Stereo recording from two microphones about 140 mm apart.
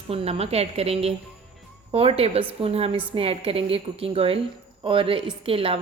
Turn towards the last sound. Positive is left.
turn(degrees=-40)  # may be behind; listen again after turning